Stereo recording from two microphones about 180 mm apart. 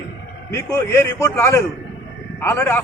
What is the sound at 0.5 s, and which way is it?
A man's voice, 15° left (ahead or behind).